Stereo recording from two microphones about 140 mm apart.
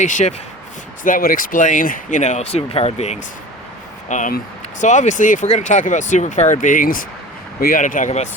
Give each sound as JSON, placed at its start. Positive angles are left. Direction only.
{"t": 0.0, "sound": "speech", "side_deg": 60}
{"t": 1.0, "sound": "speech", "side_deg": 80}
{"t": 4.1, "sound": "speech", "side_deg": 65}